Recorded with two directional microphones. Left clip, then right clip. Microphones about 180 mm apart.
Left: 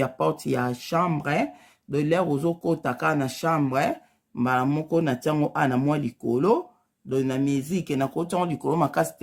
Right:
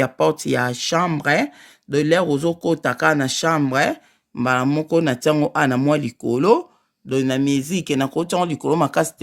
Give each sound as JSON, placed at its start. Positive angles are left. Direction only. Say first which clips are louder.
{"t": 0.0, "sound": "speech", "louder": "right 6 dB", "side_deg": -30}